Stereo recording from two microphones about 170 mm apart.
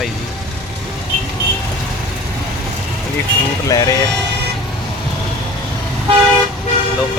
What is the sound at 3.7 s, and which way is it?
Speech, 20° left (ahead or behind).